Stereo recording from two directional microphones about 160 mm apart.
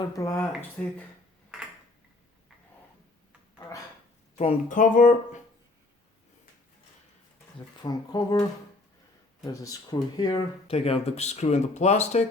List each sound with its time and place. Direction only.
0.2 s speech: 15° left (ahead or behind)
1.5 s tick-tock: 5° right (ahead or behind)
4.4 s speech: 50° left (ahead or behind)
7.8 s speech: 25° left (ahead or behind)
10.7 s speech: 35° left (ahead or behind)